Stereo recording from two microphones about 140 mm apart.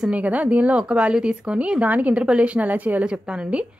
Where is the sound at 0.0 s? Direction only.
10° right (ahead or behind).